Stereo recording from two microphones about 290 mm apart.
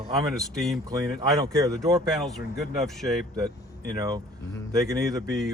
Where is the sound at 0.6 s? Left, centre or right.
Centre.